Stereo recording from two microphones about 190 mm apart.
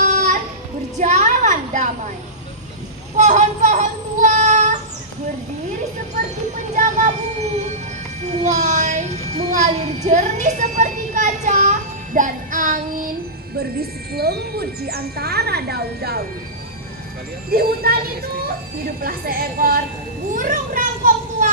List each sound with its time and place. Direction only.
0.0 s children playing: 40° right (ahead or behind)
0.9 s a sound: 40° right (ahead or behind)
3.2 s child singing: 40° right (ahead or behind)
6.7 s music: 40° right (ahead or behind)
8.2 s child singing: 35° right (ahead or behind)
14.1 s speech: 55° right (ahead or behind)
17.5 s a woman's voice: 50° right (ahead or behind)
18.9 s a woman's voice: 50° right (ahead or behind)
20.3 s children playing: 45° right (ahead or behind)